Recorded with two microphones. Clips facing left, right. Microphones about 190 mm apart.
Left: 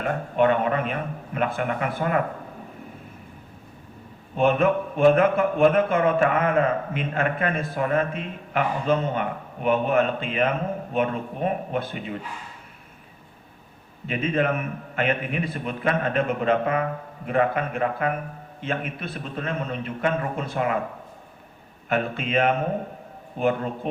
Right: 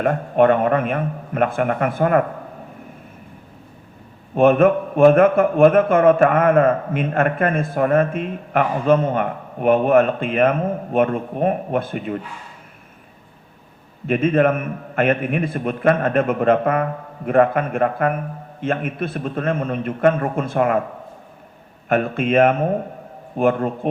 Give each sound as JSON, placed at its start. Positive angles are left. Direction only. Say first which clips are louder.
{"t": 0.0, "sound": "a man's voice", "louder": "right 6 dB", "side_deg": -50}
{"t": 4.4, "sound": "a man's voice", "louder": "right 6 dB", "side_deg": -50}
{"t": 14.1, "sound": "a man's voice", "louder": "right 7 dB", "side_deg": -50}
{"t": 21.8, "sound": "a man's voice", "louder": "right 7 dB", "side_deg": -50}